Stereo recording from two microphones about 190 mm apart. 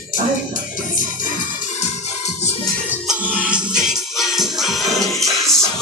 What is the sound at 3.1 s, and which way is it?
Music, 5° right (ahead or behind).